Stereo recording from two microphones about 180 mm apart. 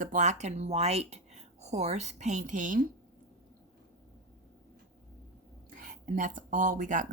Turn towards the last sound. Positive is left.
turn(degrees=-45)  # may be behind; listen again after turning